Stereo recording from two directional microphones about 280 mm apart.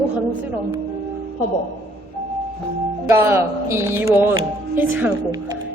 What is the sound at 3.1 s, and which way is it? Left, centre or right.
Music, centre.